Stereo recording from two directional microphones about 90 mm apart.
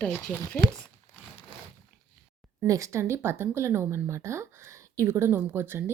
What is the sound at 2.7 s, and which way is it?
Speech, 35° right (ahead or behind).